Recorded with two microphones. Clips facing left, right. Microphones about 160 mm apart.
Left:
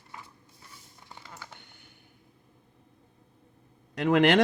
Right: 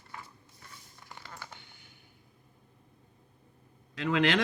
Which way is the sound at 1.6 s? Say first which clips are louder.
Left 2 dB; 55° left (ahead or behind).